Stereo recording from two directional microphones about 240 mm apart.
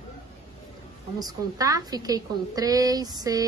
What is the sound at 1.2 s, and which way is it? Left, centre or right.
A woman's voice, centre.